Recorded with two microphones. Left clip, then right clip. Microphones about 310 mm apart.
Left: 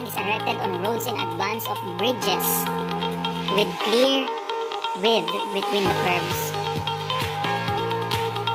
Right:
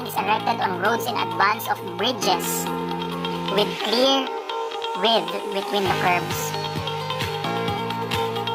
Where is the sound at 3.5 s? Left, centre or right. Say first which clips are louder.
Even; right.